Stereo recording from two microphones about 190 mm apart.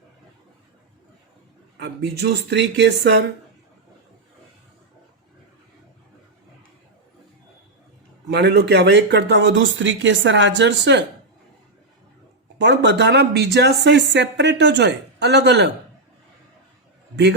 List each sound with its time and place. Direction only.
2.5 s speech: 65° right (ahead or behind)
8.3 s speech: 60° right (ahead or behind)
12.5 s speech: 65° right (ahead or behind)
17.2 s speech: 65° right (ahead or behind)